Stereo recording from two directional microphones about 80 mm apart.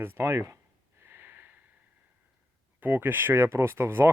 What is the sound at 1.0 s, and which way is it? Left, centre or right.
Snort, right.